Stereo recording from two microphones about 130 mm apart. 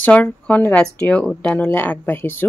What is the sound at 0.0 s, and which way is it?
A woman's voice, 15° left (ahead or behind).